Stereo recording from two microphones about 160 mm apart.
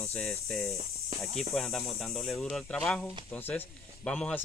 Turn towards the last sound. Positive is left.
turn(degrees=10)  # may be behind; listen again after turning